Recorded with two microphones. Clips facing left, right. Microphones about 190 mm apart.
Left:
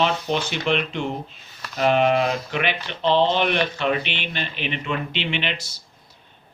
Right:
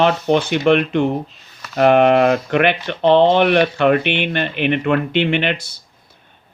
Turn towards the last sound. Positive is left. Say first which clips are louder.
# right 8 dB
turn(degrees=-55)  # may be behind; listen again after turning